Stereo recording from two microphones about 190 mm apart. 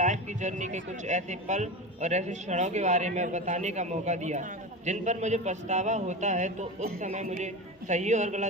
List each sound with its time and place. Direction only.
0.0 s speech: 40° right (ahead or behind)